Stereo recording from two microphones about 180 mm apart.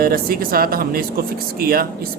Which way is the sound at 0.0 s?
55° right (ahead or behind).